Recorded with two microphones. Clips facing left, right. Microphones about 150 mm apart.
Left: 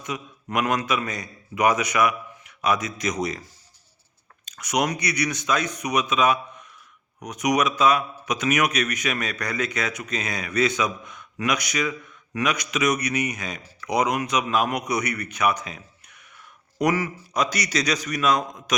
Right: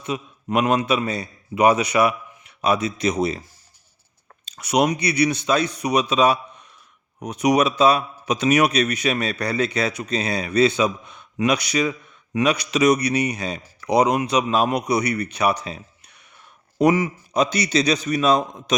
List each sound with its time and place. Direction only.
0.0 s a man's voice: 25° right (ahead or behind)
4.4 s a man's voice: 30° right (ahead or behind)